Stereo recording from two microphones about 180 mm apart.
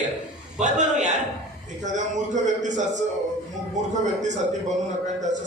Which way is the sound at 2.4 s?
45° right (ahead or behind).